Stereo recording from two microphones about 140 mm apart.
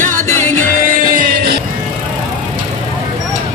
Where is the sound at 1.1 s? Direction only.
85° right.